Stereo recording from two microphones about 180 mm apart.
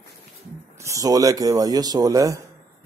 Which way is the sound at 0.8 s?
15° right (ahead or behind).